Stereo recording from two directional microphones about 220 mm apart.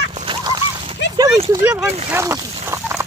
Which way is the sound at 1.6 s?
10° right (ahead or behind).